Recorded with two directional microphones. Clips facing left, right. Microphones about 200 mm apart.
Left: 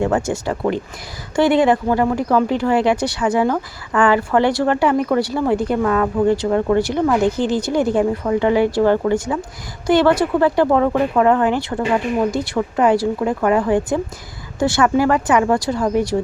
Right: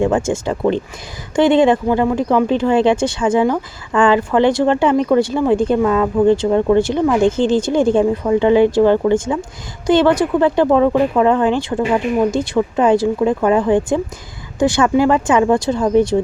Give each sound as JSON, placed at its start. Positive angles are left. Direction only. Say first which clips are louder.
{"t": 0.0, "sound": "speech", "louder": "right 3 dB", "side_deg": -20}